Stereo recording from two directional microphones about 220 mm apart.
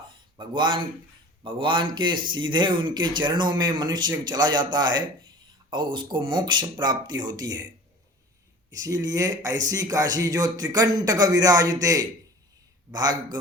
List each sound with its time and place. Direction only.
0.3 s speech: 20° right (ahead or behind)
8.7 s speech: 15° right (ahead or behind)